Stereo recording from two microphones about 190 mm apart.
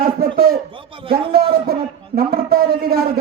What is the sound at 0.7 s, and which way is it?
Speech, 25° right (ahead or behind).